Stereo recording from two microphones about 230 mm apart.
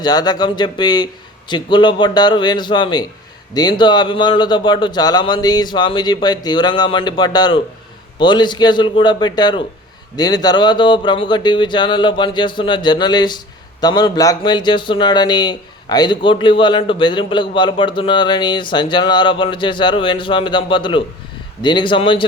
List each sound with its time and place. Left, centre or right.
0.0 s speech: centre